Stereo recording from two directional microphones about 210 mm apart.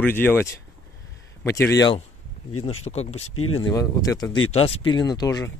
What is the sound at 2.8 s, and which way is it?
Speech, 30° left (ahead or behind).